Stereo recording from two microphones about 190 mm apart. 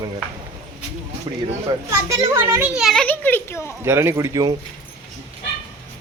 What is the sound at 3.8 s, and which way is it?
Speech, 15° right (ahead or behind).